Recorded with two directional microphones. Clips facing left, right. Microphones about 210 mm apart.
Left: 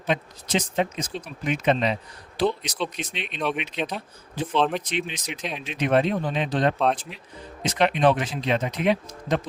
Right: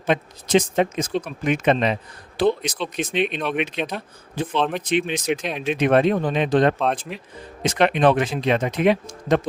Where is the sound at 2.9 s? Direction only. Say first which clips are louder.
Right 11 dB; 55° right (ahead or behind).